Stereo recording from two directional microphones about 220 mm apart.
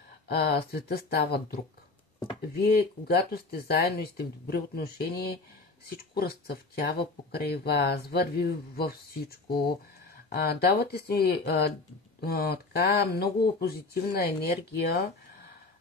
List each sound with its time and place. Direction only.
0.3 s speech: 45° left (ahead or behind)